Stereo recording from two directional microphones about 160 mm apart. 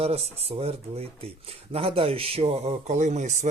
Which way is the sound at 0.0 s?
40° right (ahead or behind).